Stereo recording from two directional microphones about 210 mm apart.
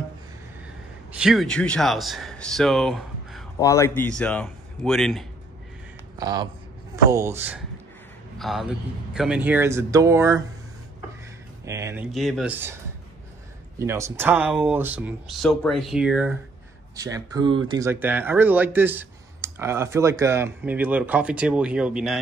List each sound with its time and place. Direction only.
1.1 s speech: centre (ahead or behind)
3.5 s speech: 15° left (ahead or behind)
6.1 s speech: 20° right (ahead or behind)
11.6 s speech: 15° right (ahead or behind)
12.1 s speech: centre (ahead or behind)
16.9 s speech: 15° right (ahead or behind)